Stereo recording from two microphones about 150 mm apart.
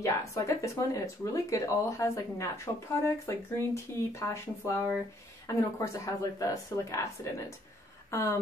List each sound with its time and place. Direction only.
0.0 s speech: 20° left (ahead or behind)